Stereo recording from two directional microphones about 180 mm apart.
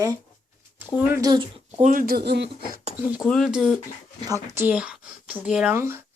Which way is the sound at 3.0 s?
5° right (ahead or behind).